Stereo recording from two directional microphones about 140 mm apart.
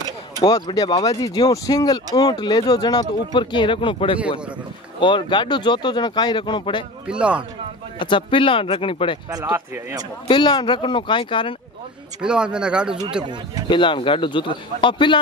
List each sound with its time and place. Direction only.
0.4 s speech: 30° left (ahead or behind)
7.1 s speech: 10° right (ahead or behind)
8.0 s speech: 35° left (ahead or behind)
9.4 s speech: 15° right (ahead or behind)
10.2 s speech: 35° left (ahead or behind)
12.2 s speech: 5° right (ahead or behind)
13.7 s speech: 35° left (ahead or behind)